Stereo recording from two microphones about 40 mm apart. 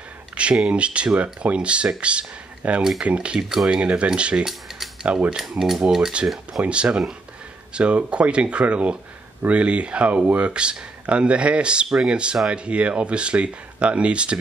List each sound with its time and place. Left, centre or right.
0.4 s speech: right
5.6 s speech: centre
6.7 s speech: right